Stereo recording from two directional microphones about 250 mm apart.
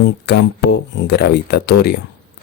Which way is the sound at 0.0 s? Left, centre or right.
Left.